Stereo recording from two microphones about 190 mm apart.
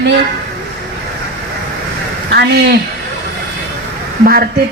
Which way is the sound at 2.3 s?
60° right (ahead or behind).